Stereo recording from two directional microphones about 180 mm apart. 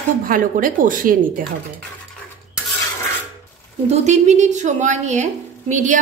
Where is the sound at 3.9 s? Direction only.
40° right (ahead or behind).